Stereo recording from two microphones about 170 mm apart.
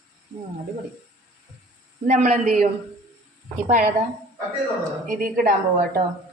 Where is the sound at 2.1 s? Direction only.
45° right (ahead or behind).